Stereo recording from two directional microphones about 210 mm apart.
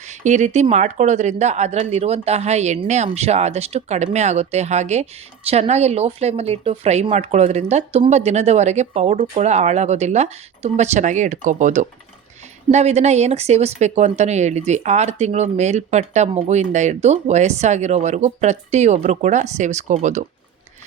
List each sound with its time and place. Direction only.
0.0 s speech: 35° right (ahead or behind)